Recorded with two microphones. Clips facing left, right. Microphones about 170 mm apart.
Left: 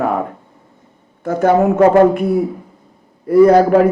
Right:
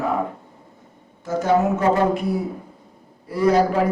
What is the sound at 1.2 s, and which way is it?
A man's voice, 60° left (ahead or behind).